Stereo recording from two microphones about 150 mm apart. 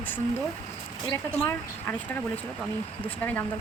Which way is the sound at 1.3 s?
15° left (ahead or behind).